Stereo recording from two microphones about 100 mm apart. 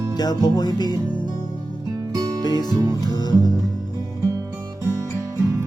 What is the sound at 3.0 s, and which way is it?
Music, 45° left (ahead or behind).